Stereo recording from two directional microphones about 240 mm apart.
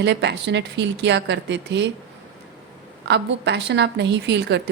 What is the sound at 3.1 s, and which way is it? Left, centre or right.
A woman's voice, right.